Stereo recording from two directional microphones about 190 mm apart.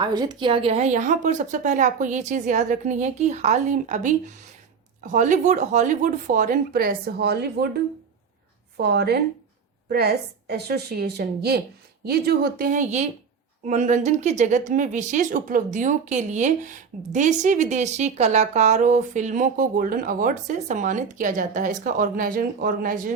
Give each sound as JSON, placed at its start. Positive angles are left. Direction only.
{"t": 0.0, "sound": "speech", "side_deg": -20}
{"t": 8.8, "sound": "a woman's voice", "side_deg": -60}